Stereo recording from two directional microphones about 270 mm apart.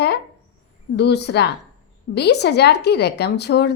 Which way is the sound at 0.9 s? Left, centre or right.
Left.